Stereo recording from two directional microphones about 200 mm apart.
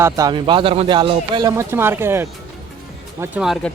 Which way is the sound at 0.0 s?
20° right (ahead or behind).